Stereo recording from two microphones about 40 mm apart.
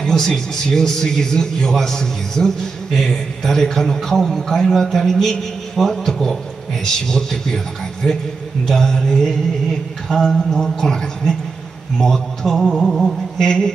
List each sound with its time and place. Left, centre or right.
0.0 s a man's voice: centre
13.4 s a man's voice: centre